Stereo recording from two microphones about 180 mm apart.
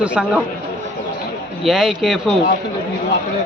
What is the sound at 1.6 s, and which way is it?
Speech, centre (ahead or behind).